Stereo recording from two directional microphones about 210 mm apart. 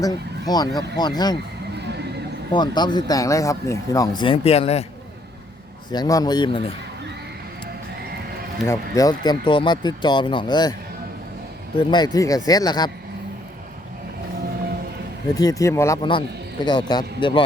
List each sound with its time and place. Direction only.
0.0 s speech: 20° left (ahead or behind)
2.5 s speech: 20° left (ahead or behind)
5.9 s speech: 20° left (ahead or behind)
8.6 s speech: 15° left (ahead or behind)
11.8 s speech: 20° left (ahead or behind)
15.4 s speech: 15° left (ahead or behind)